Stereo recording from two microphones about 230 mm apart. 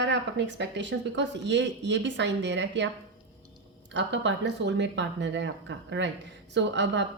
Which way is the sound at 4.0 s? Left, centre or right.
Right.